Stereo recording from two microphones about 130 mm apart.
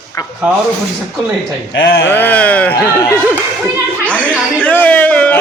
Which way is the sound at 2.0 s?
15° left (ahead or behind).